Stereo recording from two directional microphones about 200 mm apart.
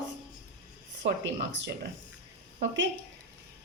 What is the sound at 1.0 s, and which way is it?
Speech, 65° right (ahead or behind).